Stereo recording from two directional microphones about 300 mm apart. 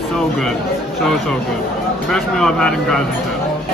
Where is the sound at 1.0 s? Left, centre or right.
Centre.